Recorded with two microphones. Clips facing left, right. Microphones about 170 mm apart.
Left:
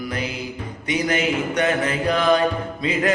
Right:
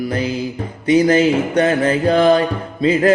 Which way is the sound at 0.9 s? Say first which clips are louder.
Right 9 dB; 30° right (ahead or behind).